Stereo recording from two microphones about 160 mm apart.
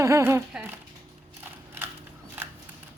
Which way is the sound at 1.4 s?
15° right (ahead or behind).